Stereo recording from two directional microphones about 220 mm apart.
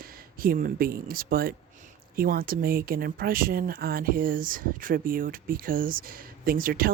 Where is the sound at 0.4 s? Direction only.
40° right (ahead or behind).